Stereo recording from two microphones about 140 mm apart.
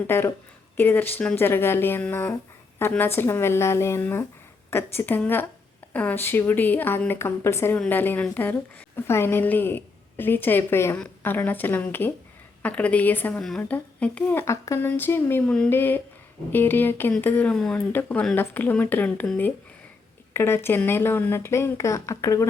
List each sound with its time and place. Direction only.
0.1 s speech: 15° left (ahead or behind)
20.3 s speech: 15° left (ahead or behind)